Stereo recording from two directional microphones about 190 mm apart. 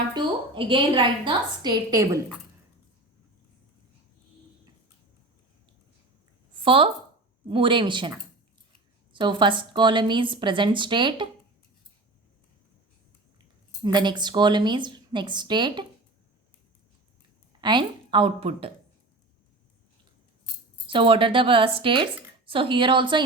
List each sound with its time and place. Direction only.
0.1 s a woman's voice: 25° right (ahead or behind)
6.7 s a woman's voice: 30° right (ahead or behind)
9.1 s a woman's voice: 25° right (ahead or behind)
13.8 s a woman's voice: 25° right (ahead or behind)
17.6 s a woman's voice: 25° right (ahead or behind)
20.8 s a woman's voice: 25° right (ahead or behind)